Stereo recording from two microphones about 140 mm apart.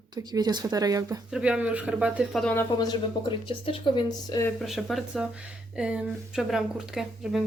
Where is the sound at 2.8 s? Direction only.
35° left (ahead or behind).